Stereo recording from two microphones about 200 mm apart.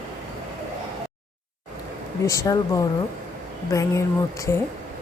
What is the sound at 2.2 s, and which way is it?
Speech, 15° left (ahead or behind).